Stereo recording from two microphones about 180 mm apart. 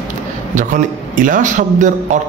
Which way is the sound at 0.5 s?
45° right (ahead or behind).